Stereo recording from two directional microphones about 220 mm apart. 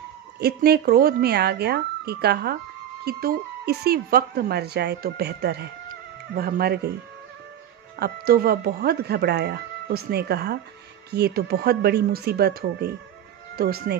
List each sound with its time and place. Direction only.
0.4 s speech: 45° right (ahead or behind)
7.9 s speech: 45° right (ahead or behind)